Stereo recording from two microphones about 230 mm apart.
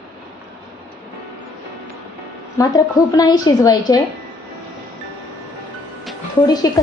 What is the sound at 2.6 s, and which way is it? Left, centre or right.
A woman's voice, centre.